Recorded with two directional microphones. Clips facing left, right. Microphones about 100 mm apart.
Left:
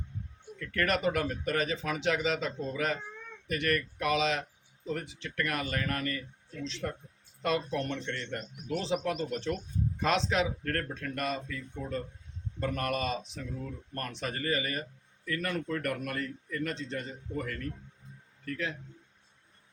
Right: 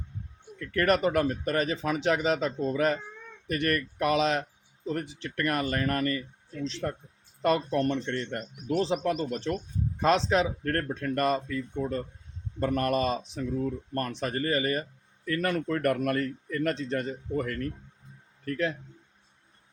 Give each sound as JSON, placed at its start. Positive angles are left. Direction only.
{"t": 0.7, "sound": "a man's voice", "side_deg": -40}
{"t": 7.4, "sound": "speech", "side_deg": -45}
{"t": 15.3, "sound": "a man's voice", "side_deg": -50}